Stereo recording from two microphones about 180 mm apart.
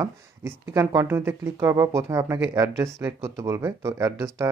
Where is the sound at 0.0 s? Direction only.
15° right (ahead or behind).